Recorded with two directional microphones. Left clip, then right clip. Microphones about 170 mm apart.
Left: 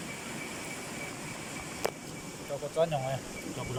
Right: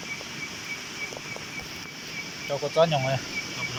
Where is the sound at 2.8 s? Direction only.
Centre (ahead or behind).